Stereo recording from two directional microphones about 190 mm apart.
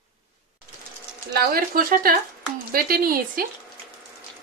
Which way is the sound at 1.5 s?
50° right (ahead or behind).